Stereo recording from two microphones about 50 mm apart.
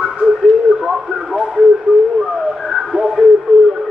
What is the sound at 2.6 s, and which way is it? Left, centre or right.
Radio, centre.